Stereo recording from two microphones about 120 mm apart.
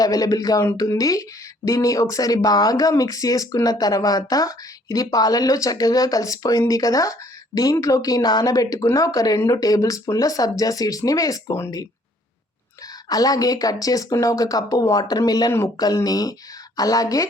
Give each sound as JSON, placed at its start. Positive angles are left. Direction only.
{"t": 0.0, "sound": "speech", "side_deg": 30}
{"t": 13.1, "sound": "speech", "side_deg": 30}